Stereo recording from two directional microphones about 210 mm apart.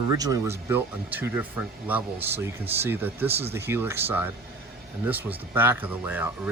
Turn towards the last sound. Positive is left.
turn(degrees=-10)  # may be behind; listen again after turning